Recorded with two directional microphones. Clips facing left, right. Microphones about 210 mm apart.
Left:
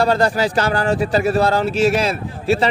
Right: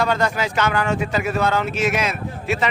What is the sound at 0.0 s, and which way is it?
Speech, 35° left (ahead or behind).